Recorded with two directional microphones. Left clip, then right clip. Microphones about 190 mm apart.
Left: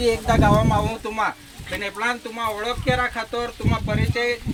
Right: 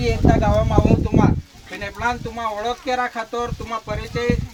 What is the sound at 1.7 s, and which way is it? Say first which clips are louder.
Speech: right 1 dB; 55° right (ahead or behind).